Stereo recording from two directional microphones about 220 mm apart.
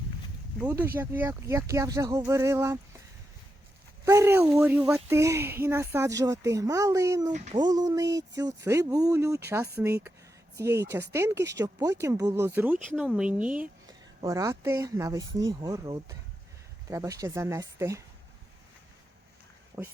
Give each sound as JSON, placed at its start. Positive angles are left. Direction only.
{"t": 0.6, "sound": "speech", "side_deg": -10}
{"t": 4.0, "sound": "speech", "side_deg": -15}
{"t": 19.8, "sound": "speech", "side_deg": -5}